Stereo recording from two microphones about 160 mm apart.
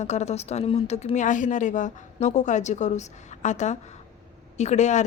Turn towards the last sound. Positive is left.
turn(degrees=45)  # may be behind; listen again after turning